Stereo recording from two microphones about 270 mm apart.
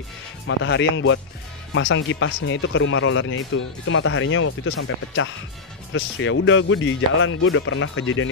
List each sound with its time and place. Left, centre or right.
0.5 s speech: left